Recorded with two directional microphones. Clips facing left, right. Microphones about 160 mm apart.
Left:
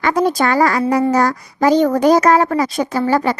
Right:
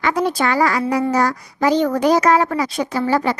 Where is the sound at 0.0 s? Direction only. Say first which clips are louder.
Left 3 dB; 45° left (ahead or behind).